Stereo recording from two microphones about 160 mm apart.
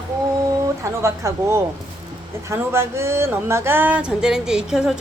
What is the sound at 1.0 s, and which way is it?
Speech, 15° right (ahead or behind).